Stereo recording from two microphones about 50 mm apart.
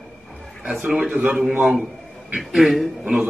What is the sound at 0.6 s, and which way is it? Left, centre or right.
Speech, centre.